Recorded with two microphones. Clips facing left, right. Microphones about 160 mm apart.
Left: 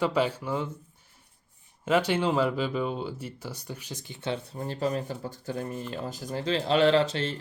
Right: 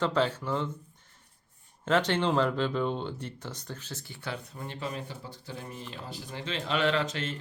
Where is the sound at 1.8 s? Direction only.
10° left (ahead or behind).